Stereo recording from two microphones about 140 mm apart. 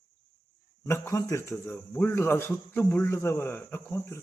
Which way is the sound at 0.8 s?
20° left (ahead or behind).